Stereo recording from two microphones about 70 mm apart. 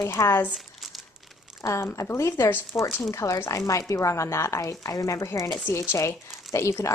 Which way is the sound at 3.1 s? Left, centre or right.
Left.